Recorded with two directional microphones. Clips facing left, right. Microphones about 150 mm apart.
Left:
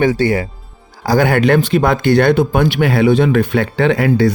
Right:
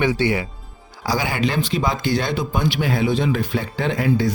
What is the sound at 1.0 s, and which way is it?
Speech, 55° left (ahead or behind).